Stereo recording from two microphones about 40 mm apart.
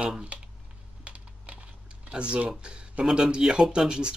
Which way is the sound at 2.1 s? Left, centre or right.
Right.